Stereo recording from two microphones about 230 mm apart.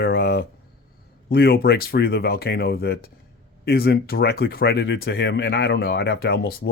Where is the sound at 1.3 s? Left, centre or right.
Left.